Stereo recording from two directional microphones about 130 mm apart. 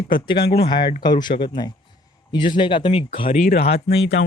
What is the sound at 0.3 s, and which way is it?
Speech, 45° left (ahead or behind).